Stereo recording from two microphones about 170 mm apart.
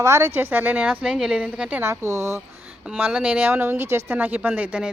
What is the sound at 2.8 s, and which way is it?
A woman's voice, 5° right (ahead or behind).